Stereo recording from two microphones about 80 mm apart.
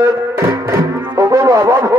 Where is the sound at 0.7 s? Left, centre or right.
Right.